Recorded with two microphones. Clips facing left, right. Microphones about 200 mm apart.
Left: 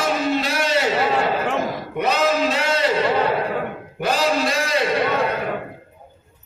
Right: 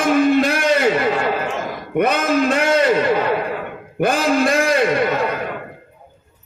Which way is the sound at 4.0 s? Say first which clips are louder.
Right 4 dB; 50° right (ahead or behind).